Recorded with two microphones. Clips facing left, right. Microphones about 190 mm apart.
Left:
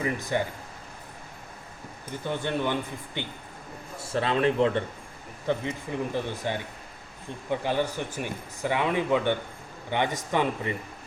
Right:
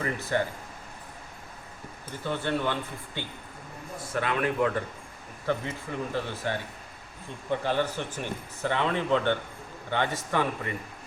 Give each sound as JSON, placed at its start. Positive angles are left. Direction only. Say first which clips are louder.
{"t": 0.0, "sound": "speech", "louder": "left 1 dB", "side_deg": 15}
{"t": 2.0, "sound": "speech", "louder": "even", "side_deg": 15}
{"t": 4.0, "sound": "a man's voice", "louder": "left 4 dB", "side_deg": 30}
{"t": 7.6, "sound": "speech", "louder": "left 1 dB", "side_deg": 15}